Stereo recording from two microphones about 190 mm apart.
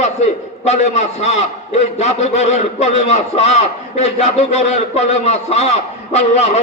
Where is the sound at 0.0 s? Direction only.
35° left (ahead or behind).